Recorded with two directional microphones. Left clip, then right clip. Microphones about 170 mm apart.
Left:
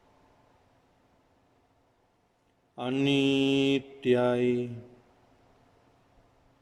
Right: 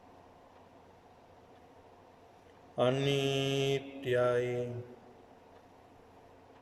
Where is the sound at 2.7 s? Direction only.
55° left (ahead or behind).